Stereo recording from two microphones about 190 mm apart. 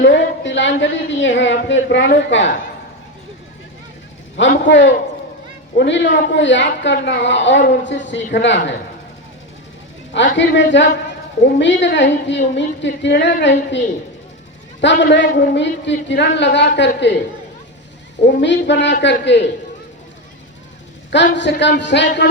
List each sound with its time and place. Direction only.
0.0 s a woman's voice: 65° left (ahead or behind)
4.4 s a woman's voice: 70° left (ahead or behind)
10.3 s a woman's voice: 70° left (ahead or behind)
18.3 s a woman's voice: 65° left (ahead or behind)
21.3 s a woman's voice: 65° left (ahead or behind)